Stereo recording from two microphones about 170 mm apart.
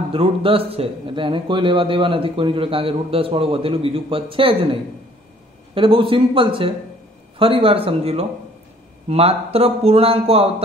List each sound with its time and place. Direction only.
0.1 s a man's voice: 30° right (ahead or behind)
5.8 s a man's voice: 30° right (ahead or behind)